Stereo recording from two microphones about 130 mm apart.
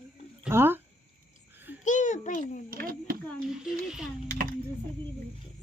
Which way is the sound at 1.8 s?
75° left (ahead or behind).